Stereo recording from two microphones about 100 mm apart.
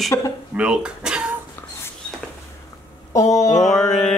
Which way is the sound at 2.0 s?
10° left (ahead or behind).